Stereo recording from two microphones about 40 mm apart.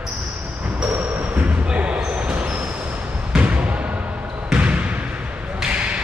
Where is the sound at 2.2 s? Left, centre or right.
Right.